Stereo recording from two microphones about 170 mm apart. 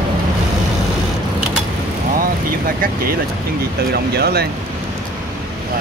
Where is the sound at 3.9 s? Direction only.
70° right (ahead or behind).